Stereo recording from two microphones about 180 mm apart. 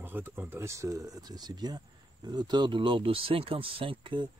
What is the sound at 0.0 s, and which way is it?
Speech, 10° right (ahead or behind).